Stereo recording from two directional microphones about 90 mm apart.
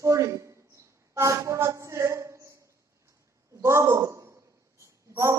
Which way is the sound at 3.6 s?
35° right (ahead or behind).